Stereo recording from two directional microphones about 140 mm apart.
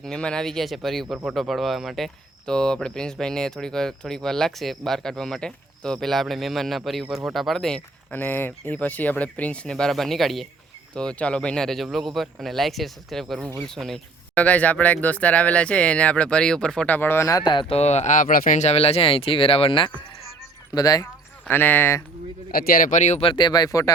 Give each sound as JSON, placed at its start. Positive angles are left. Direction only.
{"t": 0.0, "sound": "speech", "side_deg": 5}
{"t": 8.1, "sound": "speech", "side_deg": 15}
{"t": 17.7, "sound": "speech", "side_deg": 55}
{"t": 20.7, "sound": "speech", "side_deg": 25}
{"t": 21.0, "sound": "speech", "side_deg": 15}
{"t": 22.5, "sound": "speech", "side_deg": 90}
{"t": 23.2, "sound": "speech", "side_deg": 35}